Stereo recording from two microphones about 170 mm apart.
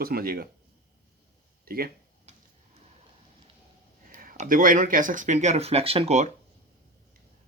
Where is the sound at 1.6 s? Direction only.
60° right (ahead or behind).